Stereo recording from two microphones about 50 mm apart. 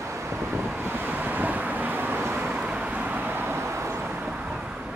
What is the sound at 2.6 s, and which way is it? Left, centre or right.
Vehicle, right.